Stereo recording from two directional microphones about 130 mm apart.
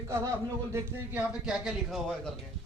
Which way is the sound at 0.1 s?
20° right (ahead or behind).